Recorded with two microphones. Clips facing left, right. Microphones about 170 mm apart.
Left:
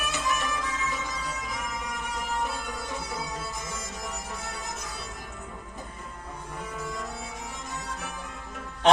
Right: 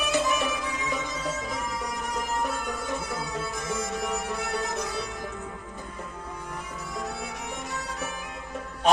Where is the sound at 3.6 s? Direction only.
65° right (ahead or behind).